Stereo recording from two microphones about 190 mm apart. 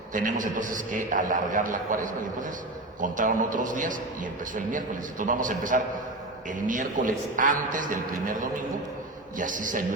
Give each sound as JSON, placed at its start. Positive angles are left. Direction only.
{"t": 0.1, "sound": "a man's voice", "side_deg": -45}
{"t": 5.2, "sound": "a man's voice", "side_deg": -45}